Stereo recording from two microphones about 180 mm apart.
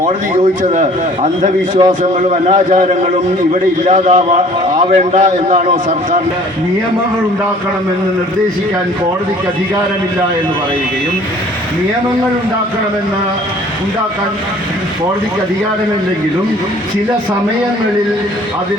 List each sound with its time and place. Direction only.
0.6 s a man's voice: 40° right (ahead or behind)